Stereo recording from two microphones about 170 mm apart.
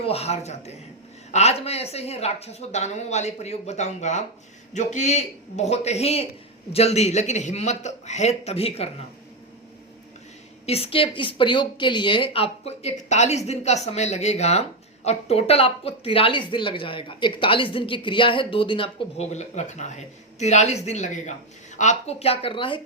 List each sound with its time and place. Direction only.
0.0 s a woman's voice: 35° left (ahead or behind)
10.7 s a woman's voice: 35° left (ahead or behind)